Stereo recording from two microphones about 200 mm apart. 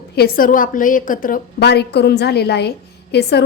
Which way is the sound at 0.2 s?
45° left (ahead or behind).